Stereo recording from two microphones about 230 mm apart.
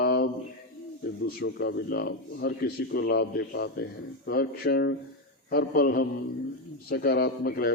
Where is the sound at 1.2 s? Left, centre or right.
Left.